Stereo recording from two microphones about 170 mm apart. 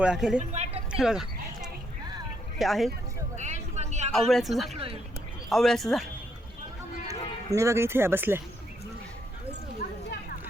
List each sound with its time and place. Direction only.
0.0 s speech: 5° right (ahead or behind)
0.3 s speech: 40° right (ahead or behind)
0.9 s a sound: 5° right (ahead or behind)
2.6 s speech: centre (ahead or behind)
3.3 s a sound: 45° right (ahead or behind)
4.3 s speech: centre (ahead or behind)
4.7 s speech: 35° right (ahead or behind)
5.5 s speech: centre (ahead or behind)
7.1 s speech: 15° right (ahead or behind)